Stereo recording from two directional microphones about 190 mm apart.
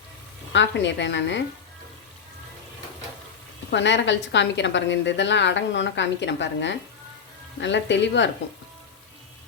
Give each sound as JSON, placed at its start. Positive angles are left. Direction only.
{"t": 0.5, "sound": "a woman's voice", "side_deg": 70}
{"t": 3.7, "sound": "a woman's voice", "side_deg": 70}